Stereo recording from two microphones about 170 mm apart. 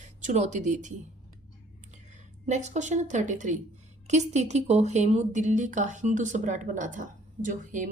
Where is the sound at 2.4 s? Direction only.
40° right (ahead or behind).